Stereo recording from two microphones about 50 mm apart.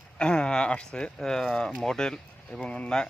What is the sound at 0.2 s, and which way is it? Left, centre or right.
Speech, centre.